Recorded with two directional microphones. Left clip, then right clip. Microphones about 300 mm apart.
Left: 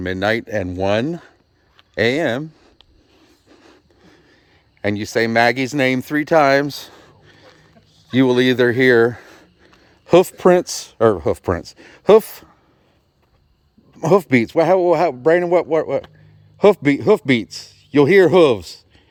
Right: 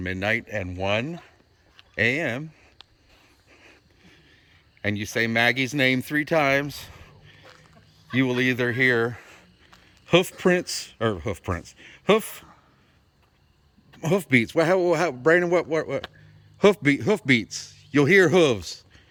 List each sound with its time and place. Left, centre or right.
0.0 s speech: centre
3.5 s a sound: left
4.8 s speech: centre
14.0 s a man's voice: centre